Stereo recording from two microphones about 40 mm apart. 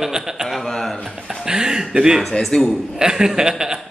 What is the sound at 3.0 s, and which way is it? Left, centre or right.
Speech, centre.